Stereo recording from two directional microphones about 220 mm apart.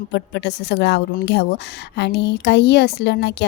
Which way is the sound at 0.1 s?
50° left (ahead or behind).